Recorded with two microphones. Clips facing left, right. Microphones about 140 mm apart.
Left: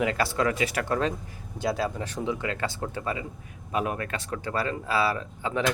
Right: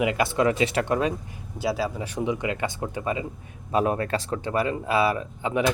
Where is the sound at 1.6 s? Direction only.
5° right (ahead or behind).